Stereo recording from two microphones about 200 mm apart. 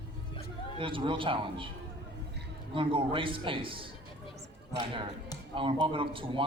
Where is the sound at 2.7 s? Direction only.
25° right (ahead or behind).